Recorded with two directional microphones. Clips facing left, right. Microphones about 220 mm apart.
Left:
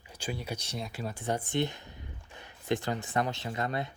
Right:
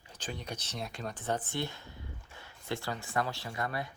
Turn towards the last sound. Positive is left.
turn(degrees=20)  # may be behind; listen again after turning